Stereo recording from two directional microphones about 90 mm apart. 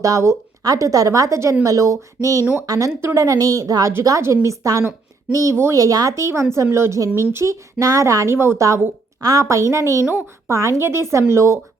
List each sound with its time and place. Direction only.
0.0 s speech: 35° right (ahead or behind)
2.9 s a woman's voice: 30° right (ahead or behind)
3.2 s speech: 40° right (ahead or behind)